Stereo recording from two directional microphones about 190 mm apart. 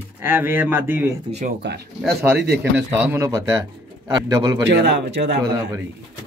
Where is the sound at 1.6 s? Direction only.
65° right (ahead or behind).